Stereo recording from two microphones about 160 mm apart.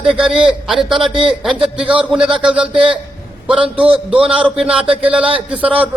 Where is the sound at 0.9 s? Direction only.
35° right (ahead or behind).